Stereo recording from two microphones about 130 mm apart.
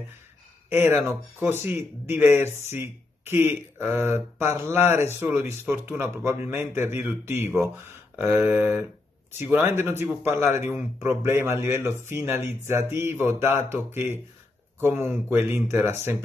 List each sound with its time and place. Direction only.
0.7 s speech: 15° right (ahead or behind)